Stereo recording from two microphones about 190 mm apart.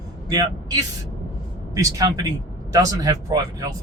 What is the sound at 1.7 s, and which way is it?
Speech, 20° right (ahead or behind).